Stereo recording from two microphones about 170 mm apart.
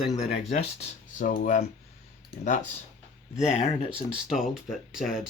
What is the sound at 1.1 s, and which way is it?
Speech, 50° left (ahead or behind).